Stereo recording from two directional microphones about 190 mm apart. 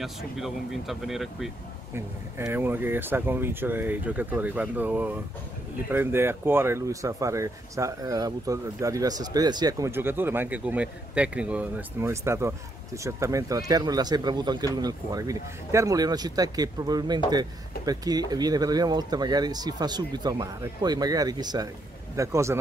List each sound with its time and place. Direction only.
0.0 s speech: centre (ahead or behind)
2.0 s speech: 15° right (ahead or behind)